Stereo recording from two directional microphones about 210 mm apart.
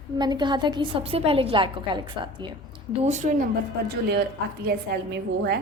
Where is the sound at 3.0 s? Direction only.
35° right (ahead or behind).